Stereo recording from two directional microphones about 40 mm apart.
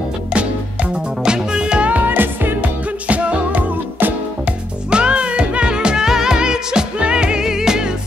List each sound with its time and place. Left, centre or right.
1.2 s music: right
2.0 s music: right
3.1 s music: right
4.9 s music: right